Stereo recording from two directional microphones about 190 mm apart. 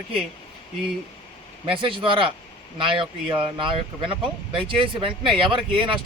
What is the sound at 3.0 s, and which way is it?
Speech, 25° right (ahead or behind).